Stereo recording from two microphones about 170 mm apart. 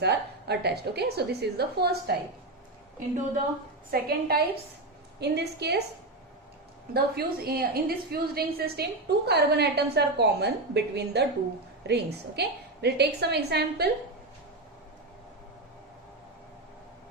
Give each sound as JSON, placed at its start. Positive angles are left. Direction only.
{"t": 0.0, "sound": "a woman's voice", "side_deg": -80}
{"t": 3.9, "sound": "a woman's voice", "side_deg": -65}
{"t": 5.2, "sound": "a woman's voice", "side_deg": -80}
{"t": 6.9, "sound": "a woman's voice", "side_deg": -60}